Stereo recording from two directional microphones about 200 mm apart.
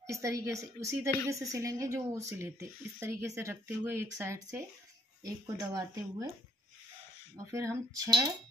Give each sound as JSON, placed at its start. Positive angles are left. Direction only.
{"t": 0.0, "sound": "speech", "side_deg": -15}
{"t": 7.3, "sound": "speech", "side_deg": -15}